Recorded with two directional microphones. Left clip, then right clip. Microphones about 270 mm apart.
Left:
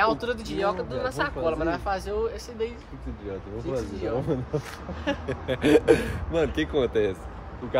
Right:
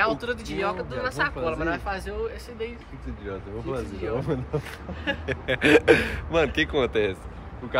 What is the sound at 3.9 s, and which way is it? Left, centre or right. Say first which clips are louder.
Speech: even; left.